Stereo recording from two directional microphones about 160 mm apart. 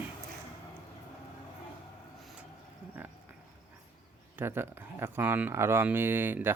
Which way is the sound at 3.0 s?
10° right (ahead or behind).